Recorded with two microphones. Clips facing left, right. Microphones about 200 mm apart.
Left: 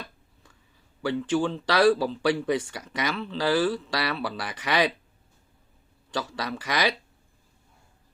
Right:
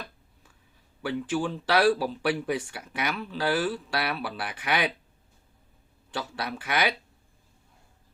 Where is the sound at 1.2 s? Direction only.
10° right (ahead or behind).